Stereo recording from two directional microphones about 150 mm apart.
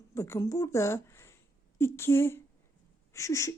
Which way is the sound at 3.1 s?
20° left (ahead or behind).